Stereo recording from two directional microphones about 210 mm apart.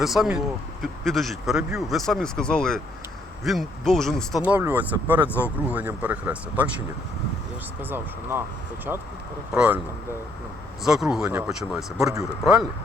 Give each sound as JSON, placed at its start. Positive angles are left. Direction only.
{"t": 0.0, "sound": "a man's voice", "side_deg": 0}
{"t": 9.6, "sound": "speech", "side_deg": -10}
{"t": 10.8, "sound": "a man's voice", "side_deg": 0}